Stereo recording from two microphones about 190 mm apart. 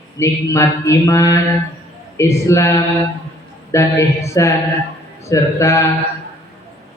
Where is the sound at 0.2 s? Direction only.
15° left (ahead or behind).